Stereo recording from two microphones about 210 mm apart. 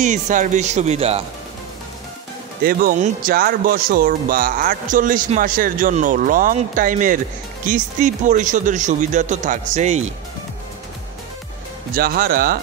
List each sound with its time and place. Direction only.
0.0 s speech: 35° right (ahead or behind)
2.6 s speech: 40° right (ahead or behind)
11.9 s speech: 45° right (ahead or behind)